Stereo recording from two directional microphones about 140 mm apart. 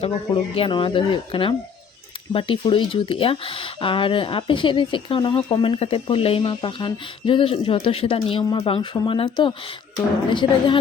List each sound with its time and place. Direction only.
0.5 s speech: 40° left (ahead or behind)